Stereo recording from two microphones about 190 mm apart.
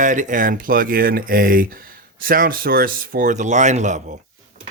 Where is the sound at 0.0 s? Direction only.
40° right (ahead or behind).